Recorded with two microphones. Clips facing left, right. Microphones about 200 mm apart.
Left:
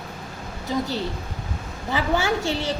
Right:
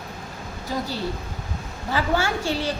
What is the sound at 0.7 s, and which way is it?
A woman's voice, 20° left (ahead or behind).